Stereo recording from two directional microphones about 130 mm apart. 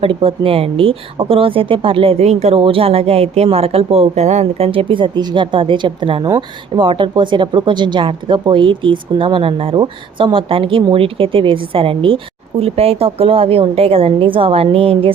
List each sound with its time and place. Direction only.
0.0 s speech: 45° right (ahead or behind)